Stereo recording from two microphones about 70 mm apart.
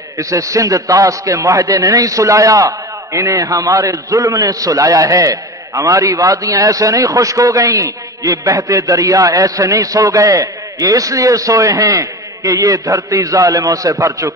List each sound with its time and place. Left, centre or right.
0.2 s a man's voice: right